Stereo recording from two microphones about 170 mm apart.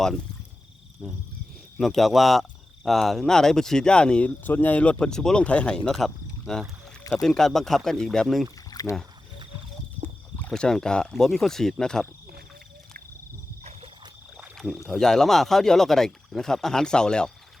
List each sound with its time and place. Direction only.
1.0 s speech: centre (ahead or behind)
8.7 s rowboat: 20° left (ahead or behind)
10.3 s speech: 5° left (ahead or behind)
14.3 s a sound: centre (ahead or behind)
14.8 s speech: 5° left (ahead or behind)